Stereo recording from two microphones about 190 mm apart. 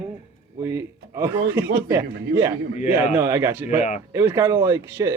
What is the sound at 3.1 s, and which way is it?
Speech, 15° right (ahead or behind).